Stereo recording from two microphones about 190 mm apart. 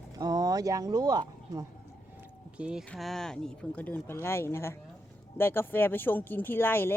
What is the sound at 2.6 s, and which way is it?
Speech, 5° right (ahead or behind).